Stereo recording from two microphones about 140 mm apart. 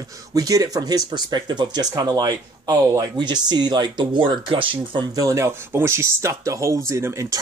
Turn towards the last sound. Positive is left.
turn(degrees=-20)  # may be behind; listen again after turning